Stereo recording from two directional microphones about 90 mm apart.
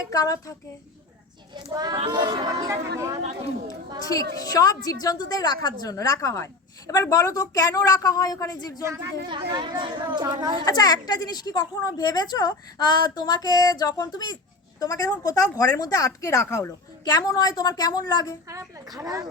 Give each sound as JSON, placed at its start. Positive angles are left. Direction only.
{"t": 0.1, "sound": "a woman's voice", "side_deg": 40}
{"t": 1.7, "sound": "speech", "side_deg": -50}
{"t": 4.0, "sound": "a woman's voice", "side_deg": 40}
{"t": 9.3, "sound": "a child's voice", "side_deg": -55}
{"t": 10.7, "sound": "a woman's voice", "side_deg": 45}
{"t": 17.0, "sound": "a woman's voice", "side_deg": 50}
{"t": 18.9, "sound": "speech", "side_deg": -40}